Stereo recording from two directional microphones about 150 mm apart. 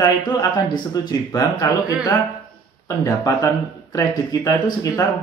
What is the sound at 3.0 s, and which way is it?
Speech, 20° left (ahead or behind).